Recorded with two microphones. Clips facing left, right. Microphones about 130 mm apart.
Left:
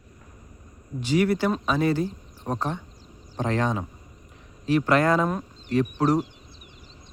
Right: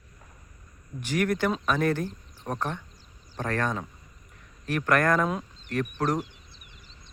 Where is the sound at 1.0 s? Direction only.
10° left (ahead or behind).